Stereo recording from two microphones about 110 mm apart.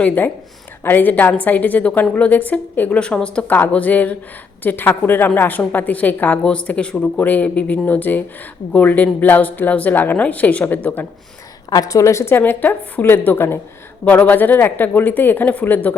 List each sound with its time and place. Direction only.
0.9 s a woman's voice: 15° left (ahead or behind)
11.7 s a woman's voice: 30° left (ahead or behind)